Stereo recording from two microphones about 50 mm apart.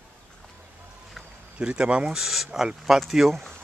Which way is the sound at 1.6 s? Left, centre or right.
Centre.